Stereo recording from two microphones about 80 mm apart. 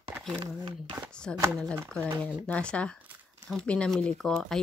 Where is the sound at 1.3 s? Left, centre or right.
Centre.